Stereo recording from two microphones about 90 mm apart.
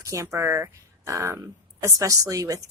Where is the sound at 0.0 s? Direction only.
35° right (ahead or behind).